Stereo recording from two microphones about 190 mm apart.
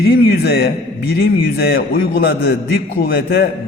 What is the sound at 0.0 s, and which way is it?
A man's voice, 55° left (ahead or behind).